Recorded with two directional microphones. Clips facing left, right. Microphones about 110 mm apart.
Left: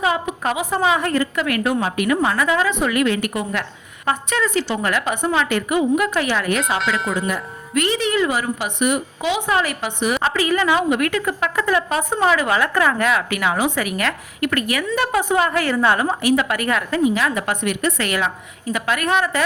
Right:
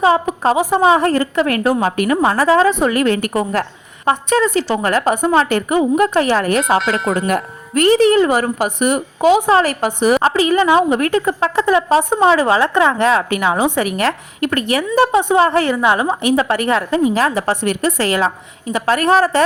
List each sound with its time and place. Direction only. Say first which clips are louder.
0.0 s a woman's voice: right 7 dB; 30° right (ahead or behind)
7.1 s speech: right 6 dB; 60° right (ahead or behind)
7.7 s a woman's voice: right 9 dB; 40° right (ahead or behind)
10.3 s a woman's voice: right 6 dB; 25° right (ahead or behind)
15.7 s a woman's voice: right 3 dB; 20° right (ahead or behind); by 19.4 s 35° right (ahead or behind)